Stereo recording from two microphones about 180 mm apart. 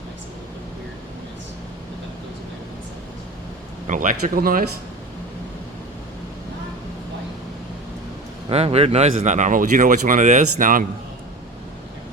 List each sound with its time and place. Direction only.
3.8 s speech: 45° right (ahead or behind)
8.4 s speech: 35° right (ahead or behind)